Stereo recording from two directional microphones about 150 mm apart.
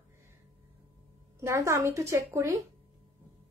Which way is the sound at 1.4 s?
20° right (ahead or behind).